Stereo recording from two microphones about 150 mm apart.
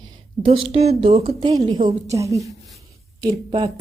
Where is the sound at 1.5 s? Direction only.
30° right (ahead or behind).